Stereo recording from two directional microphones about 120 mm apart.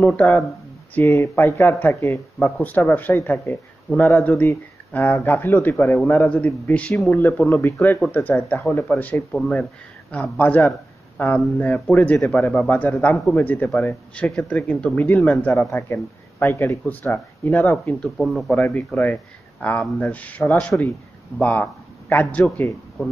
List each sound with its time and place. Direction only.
0.0 s speech: 15° left (ahead or behind)
18.1 s speech: centre (ahead or behind)
18.5 s speech: 10° left (ahead or behind)